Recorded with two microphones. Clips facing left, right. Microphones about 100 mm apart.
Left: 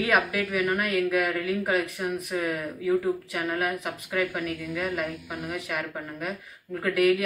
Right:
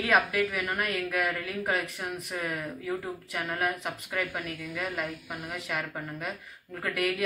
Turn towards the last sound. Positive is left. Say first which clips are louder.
# left 7 dB
turn(degrees=0)  # may be behind; listen again after turning